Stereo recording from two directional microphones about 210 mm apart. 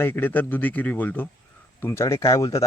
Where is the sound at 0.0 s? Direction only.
10° left (ahead or behind).